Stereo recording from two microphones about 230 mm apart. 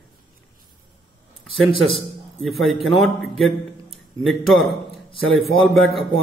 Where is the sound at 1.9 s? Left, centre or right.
Centre.